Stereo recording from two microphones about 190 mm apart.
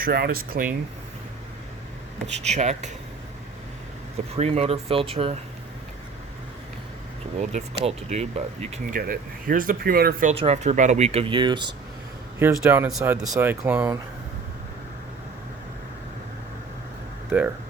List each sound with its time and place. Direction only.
0.0 s speech: 55° right (ahead or behind)
2.3 s speech: 35° right (ahead or behind)
4.4 s speech: 35° right (ahead or behind)
7.3 s speech: 35° right (ahead or behind)
8.7 s speech: 45° right (ahead or behind)
10.3 s speech: 35° right (ahead or behind)
12.4 s speech: 10° right (ahead or behind)
17.2 s speech: 10° right (ahead or behind)